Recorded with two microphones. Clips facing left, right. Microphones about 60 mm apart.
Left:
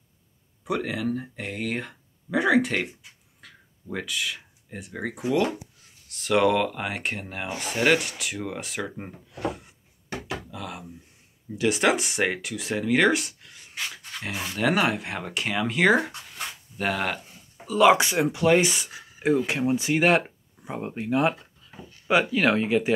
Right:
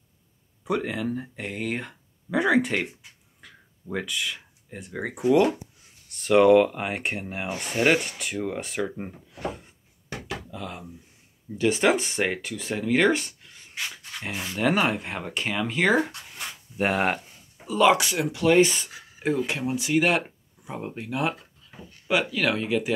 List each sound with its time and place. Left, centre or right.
0.7 s speech: centre
3.3 s a sound: centre
6.1 s speech: centre
16.7 s speech: right
17.9 s speech: left
18.5 s speech: centre
19.4 s speech: left